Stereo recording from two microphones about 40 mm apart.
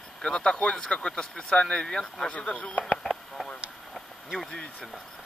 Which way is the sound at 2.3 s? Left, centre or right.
Left.